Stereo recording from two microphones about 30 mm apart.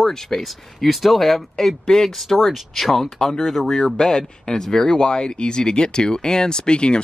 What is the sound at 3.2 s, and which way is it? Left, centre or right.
Speech, centre.